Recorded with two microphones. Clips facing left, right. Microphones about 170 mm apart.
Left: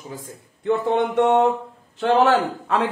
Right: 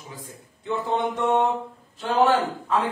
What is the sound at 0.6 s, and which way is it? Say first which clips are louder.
Mantra: left 5 dB; 60° left (ahead or behind).